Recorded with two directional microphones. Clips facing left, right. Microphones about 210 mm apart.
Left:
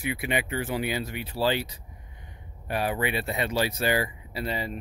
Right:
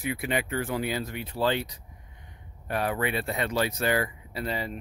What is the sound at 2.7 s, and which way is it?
Speech, 5° left (ahead or behind).